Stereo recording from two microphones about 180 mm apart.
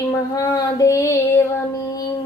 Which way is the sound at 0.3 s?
20° left (ahead or behind).